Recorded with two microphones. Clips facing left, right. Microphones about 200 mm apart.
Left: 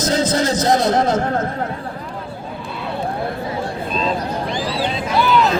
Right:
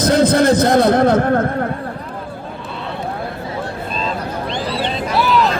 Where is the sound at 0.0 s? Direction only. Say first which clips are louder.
Right 5 dB; 60° right (ahead or behind).